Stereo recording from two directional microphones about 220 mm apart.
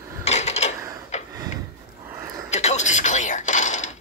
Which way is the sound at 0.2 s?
30° left (ahead or behind).